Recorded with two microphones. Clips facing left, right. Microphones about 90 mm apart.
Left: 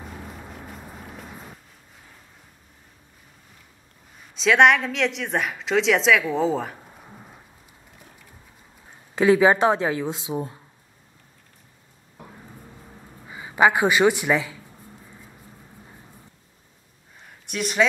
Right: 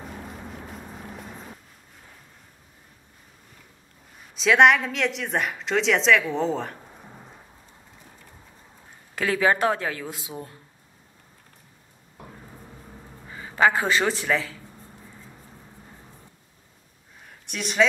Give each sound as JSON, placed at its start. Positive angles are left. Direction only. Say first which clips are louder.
{"t": 0.3, "sound": "a sound", "louder": "right 1 dB", "side_deg": 0}
{"t": 4.4, "sound": "a woman's voice", "louder": "left 1 dB", "side_deg": 0}
{"t": 9.1, "sound": "speech", "louder": "left 6 dB", "side_deg": 20}
{"t": 13.3, "sound": "speech", "louder": "left 2 dB", "side_deg": 15}
{"t": 17.5, "sound": "a woman's voice", "louder": "left 1 dB", "side_deg": 0}